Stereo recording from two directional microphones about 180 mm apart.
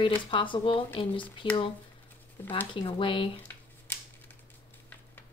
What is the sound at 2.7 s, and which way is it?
Speech, 25° left (ahead or behind).